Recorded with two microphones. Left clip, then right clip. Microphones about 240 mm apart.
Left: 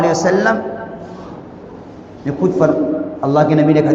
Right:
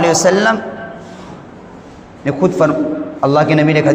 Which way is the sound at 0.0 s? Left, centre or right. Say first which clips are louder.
Right 2 dB; right.